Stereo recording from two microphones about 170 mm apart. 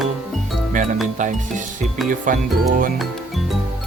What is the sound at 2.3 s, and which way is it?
Speech, 50° right (ahead or behind).